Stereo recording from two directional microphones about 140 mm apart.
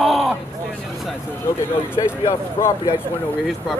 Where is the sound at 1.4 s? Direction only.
20° left (ahead or behind).